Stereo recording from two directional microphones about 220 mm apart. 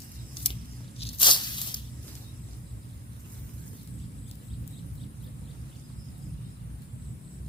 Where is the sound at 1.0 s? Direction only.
20° left (ahead or behind).